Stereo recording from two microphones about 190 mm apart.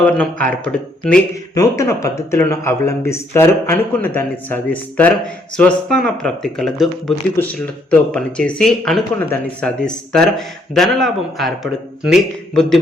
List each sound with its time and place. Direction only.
0.0 s speech: 5° left (ahead or behind)